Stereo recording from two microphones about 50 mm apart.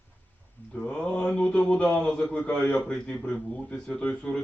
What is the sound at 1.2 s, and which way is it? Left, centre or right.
A man's voice, left.